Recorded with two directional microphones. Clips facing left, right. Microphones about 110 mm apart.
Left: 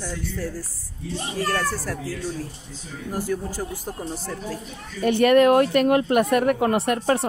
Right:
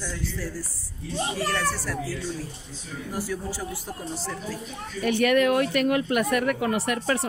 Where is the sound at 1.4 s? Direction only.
45° left (ahead or behind).